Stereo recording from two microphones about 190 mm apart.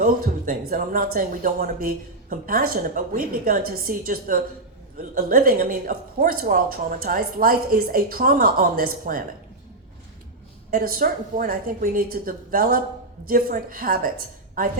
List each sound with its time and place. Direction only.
0.0 s a sound: 45° right (ahead or behind)
0.7 s speech: 45° right (ahead or behind)
10.7 s speech: 50° right (ahead or behind)